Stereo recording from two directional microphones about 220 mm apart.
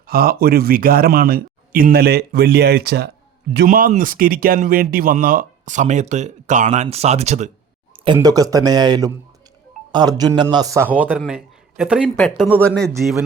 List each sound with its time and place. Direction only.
0.1 s a man's voice: 45° right (ahead or behind); by 13.2 s centre (ahead or behind)